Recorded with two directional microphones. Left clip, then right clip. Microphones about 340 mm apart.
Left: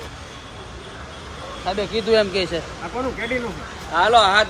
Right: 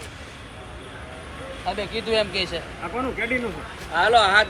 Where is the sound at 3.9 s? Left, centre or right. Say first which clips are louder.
Left 2 dB; left.